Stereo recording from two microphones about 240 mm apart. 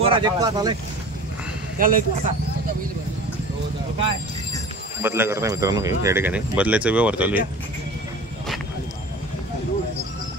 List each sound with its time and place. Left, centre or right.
0.0 s a man's voice: centre
1.8 s speech: right
5.0 s a man's voice: centre